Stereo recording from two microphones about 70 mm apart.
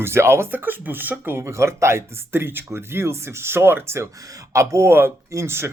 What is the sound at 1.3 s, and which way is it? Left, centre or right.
Speech, right.